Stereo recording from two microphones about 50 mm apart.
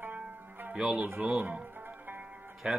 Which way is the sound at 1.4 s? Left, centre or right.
Right.